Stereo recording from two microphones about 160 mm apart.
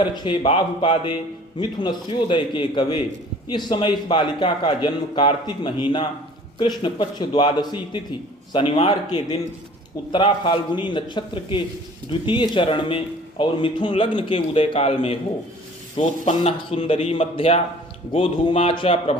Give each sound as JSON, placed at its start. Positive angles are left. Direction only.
{"t": 0.0, "sound": "a man's voice", "side_deg": 30}